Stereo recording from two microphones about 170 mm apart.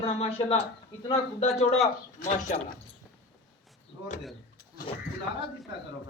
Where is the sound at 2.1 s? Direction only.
50° left (ahead or behind).